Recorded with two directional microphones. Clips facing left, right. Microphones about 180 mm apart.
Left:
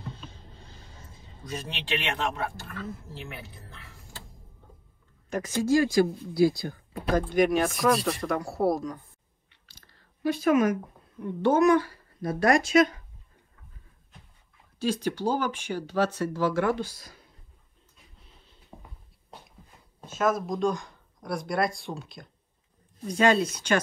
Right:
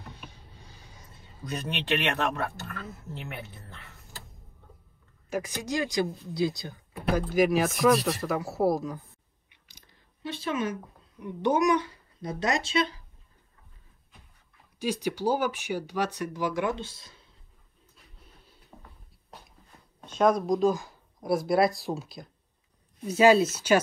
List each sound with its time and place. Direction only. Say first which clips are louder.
0.1 s a sound: left 2 dB; 15° right (ahead or behind)
1.7 s speech: right 4 dB; 55° right (ahead or behind)
5.3 s speech: left 7 dB; 15° right (ahead or behind)
7.1 s speech: left 1 dB; 5° right (ahead or behind)
9.5 s chewing: even; 15° right (ahead or behind)
10.3 s speech: left 8 dB; 30° right (ahead or behind)
11.2 s speech: left 3 dB; 15° right (ahead or behind)
14.8 s speech: left 1 dB; 10° right (ahead or behind)
18.7 s a sound: left 3 dB; 25° left (ahead or behind)
20.1 s speech: right 3 dB; 5° left (ahead or behind)